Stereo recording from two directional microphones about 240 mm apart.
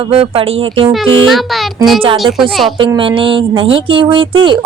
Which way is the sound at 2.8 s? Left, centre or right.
Right.